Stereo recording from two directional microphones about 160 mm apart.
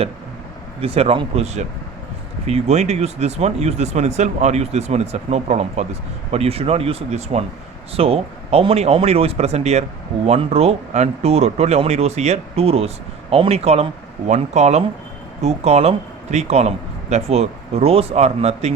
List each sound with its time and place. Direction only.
0.8 s speech: 40° right (ahead or behind)